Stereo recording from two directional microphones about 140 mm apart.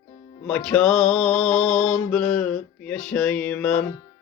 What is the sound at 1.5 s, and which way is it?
Speech, 20° left (ahead or behind).